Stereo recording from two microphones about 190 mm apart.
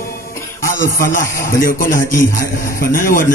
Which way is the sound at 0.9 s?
45° left (ahead or behind).